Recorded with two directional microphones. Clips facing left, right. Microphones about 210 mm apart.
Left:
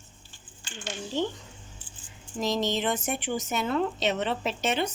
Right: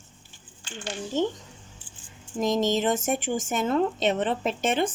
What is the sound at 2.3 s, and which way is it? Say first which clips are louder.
A woman's voice: right 4 dB; 45° right (ahead or behind).